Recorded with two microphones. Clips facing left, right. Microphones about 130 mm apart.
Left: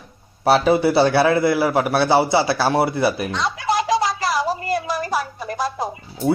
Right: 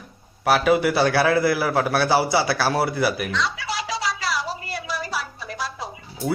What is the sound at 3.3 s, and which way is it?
Music, 50° left (ahead or behind).